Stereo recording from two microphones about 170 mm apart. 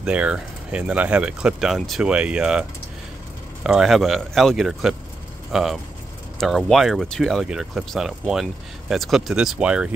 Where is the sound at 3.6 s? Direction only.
5° right (ahead or behind).